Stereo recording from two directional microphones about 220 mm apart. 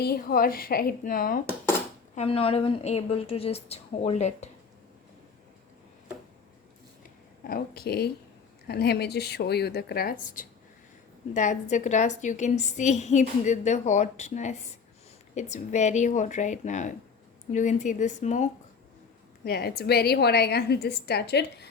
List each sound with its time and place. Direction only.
0.0 s a woman's voice: 45° left (ahead or behind)
2.1 s a woman's voice: 25° left (ahead or behind)
7.4 s a woman's voice: 45° left (ahead or behind)
19.5 s a woman's voice: 45° left (ahead or behind)